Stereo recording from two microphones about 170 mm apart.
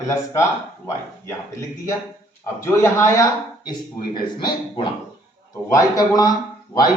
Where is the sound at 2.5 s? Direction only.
15° left (ahead or behind).